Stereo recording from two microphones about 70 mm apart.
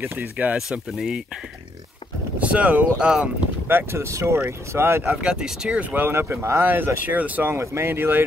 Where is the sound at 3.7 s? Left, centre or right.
Right.